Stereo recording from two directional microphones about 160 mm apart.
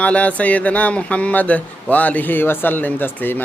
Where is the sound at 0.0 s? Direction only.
10° left (ahead or behind).